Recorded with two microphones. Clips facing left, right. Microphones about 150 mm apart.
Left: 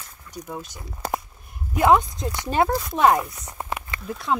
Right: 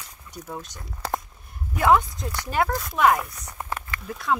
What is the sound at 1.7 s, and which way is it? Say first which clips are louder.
Speech: left 2 dB; 20° left (ahead or behind).